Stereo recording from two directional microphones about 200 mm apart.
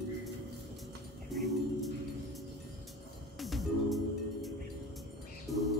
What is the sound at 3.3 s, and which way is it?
Music, centre (ahead or behind).